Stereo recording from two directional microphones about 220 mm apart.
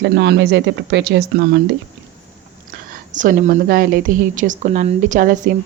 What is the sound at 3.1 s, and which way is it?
A woman's voice, 35° right (ahead or behind).